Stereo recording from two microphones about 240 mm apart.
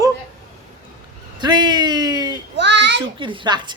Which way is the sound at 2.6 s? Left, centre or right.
Right.